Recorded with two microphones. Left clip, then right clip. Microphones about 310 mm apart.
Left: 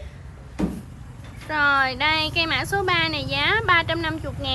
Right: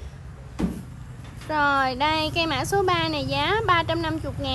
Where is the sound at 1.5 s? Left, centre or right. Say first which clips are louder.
Left 2 dB; centre.